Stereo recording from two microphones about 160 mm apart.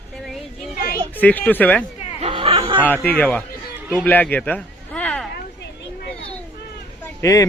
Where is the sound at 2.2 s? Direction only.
35° right (ahead or behind).